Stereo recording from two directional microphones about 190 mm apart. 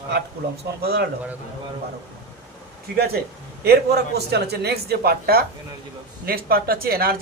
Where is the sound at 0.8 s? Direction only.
55° right (ahead or behind).